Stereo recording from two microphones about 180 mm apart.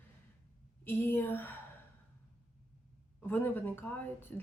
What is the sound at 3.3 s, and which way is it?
Speech, 10° left (ahead or behind).